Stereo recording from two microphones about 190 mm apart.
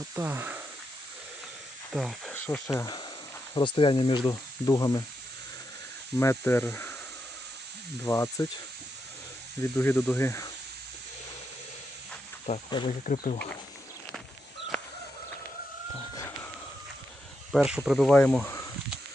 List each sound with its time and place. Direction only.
0.2 s speech: 10° right (ahead or behind)
1.9 s speech: centre (ahead or behind)
2.6 s speech: 20° left (ahead or behind)
6.1 s speech: 10° left (ahead or behind)
8.0 s speech: 15° left (ahead or behind)
9.6 s speech: 10° left (ahead or behind)
12.5 s speech: 35° left (ahead or behind)
16.1 s a sound: 15° left (ahead or behind)
17.5 s speech: centre (ahead or behind)